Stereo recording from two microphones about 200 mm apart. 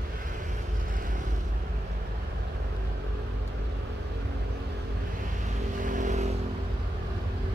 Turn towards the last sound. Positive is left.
turn(degrees=-35)  # may be behind; listen again after turning